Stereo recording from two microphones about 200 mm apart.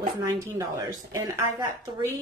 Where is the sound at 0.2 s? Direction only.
15° right (ahead or behind).